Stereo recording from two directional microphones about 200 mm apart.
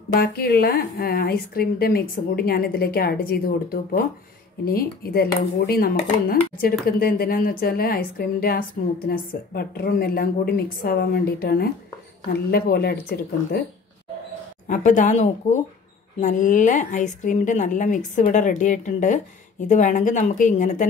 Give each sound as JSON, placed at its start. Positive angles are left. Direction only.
{"t": 0.1, "sound": "a woman's voice", "side_deg": 50}
{"t": 14.7, "sound": "a woman's voice", "side_deg": 40}